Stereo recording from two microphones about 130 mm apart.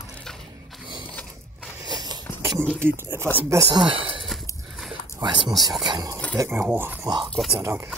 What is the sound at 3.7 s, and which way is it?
Speech, 40° right (ahead or behind).